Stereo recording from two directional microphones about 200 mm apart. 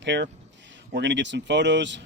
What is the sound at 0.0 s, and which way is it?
Speech, 60° right (ahead or behind).